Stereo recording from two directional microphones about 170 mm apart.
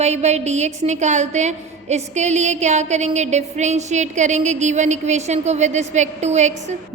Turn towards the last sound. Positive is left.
turn(degrees=-40)  # may be behind; listen again after turning